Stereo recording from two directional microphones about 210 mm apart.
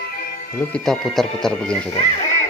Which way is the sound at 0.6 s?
5° left (ahead or behind).